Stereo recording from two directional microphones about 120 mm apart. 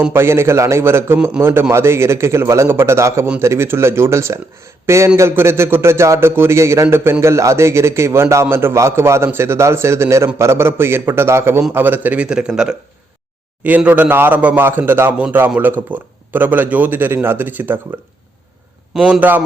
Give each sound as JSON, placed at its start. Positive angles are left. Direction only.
{"t": 0.1, "sound": "a man's voice", "side_deg": -20}
{"t": 18.9, "sound": "a man's voice", "side_deg": -5}
{"t": 19.2, "sound": "speech", "side_deg": -15}